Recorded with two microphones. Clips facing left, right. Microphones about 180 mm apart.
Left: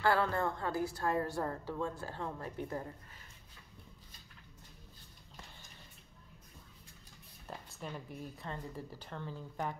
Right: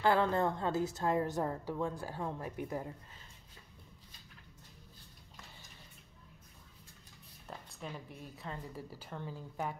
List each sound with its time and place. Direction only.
0.0 s a woman's voice: 20° right (ahead or behind)
7.4 s a woman's voice: centre (ahead or behind)